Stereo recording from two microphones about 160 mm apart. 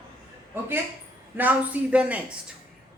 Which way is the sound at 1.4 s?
10° right (ahead or behind).